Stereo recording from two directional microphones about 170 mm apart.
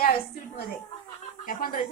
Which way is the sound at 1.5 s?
55° left (ahead or behind).